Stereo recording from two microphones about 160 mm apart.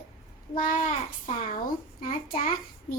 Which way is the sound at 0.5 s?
55° left (ahead or behind).